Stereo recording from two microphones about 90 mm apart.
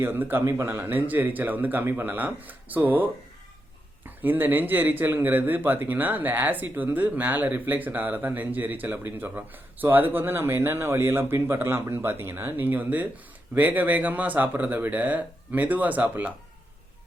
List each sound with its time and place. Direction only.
0.0 s speech: 25° right (ahead or behind)